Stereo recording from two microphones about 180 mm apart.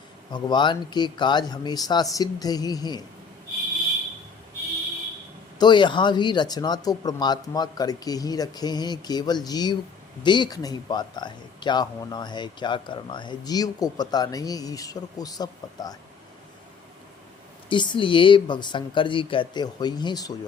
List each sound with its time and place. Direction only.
0.3 s speech: 25° left (ahead or behind)
5.5 s speech: 25° left (ahead or behind)
17.7 s speech: 25° left (ahead or behind)